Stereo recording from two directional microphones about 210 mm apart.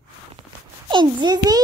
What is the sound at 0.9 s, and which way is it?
Speech, 20° right (ahead or behind).